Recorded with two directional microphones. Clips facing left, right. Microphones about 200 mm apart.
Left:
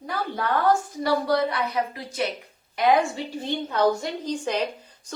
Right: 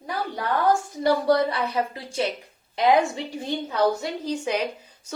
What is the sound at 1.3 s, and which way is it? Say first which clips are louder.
Speech: right 2 dB; 30° right (ahead or behind).